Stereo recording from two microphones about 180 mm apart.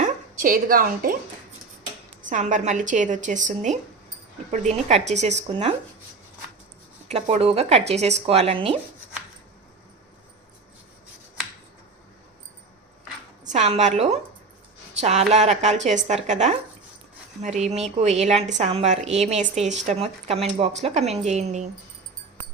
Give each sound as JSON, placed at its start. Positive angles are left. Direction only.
{"t": 0.0, "sound": "a woman's voice", "side_deg": -50}
{"t": 2.2, "sound": "speech", "side_deg": -45}
{"t": 7.1, "sound": "speech", "side_deg": -35}
{"t": 13.4, "sound": "a woman's voice", "side_deg": -40}